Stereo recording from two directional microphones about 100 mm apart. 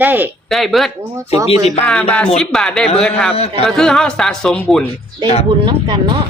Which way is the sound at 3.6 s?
5° left (ahead or behind).